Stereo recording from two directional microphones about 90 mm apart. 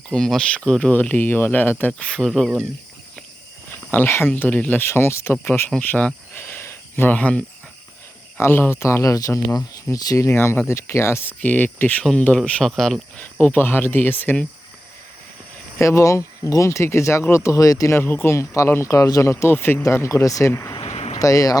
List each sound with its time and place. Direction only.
0.1 s speech: 10° left (ahead or behind)
1.9 s speech: 10° left (ahead or behind)
3.9 s speech: 25° left (ahead or behind)
6.3 s a sound: 25° left (ahead or behind)
7.1 s speech: 15° left (ahead or behind); by 10.2 s 40° left (ahead or behind)
10.2 s speech: 25° left (ahead or behind)
12.6 s speech: 5° left (ahead or behind)
13.1 s speech: 15° left (ahead or behind)
15.8 s speech: 35° left (ahead or behind)
20.9 s a sound: 90° left
21.2 s speech: 40° left (ahead or behind)